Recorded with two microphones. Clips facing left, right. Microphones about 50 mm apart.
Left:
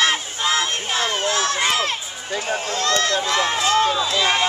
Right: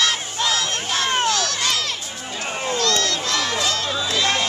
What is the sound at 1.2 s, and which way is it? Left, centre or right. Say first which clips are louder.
Run: left 1 dB; left.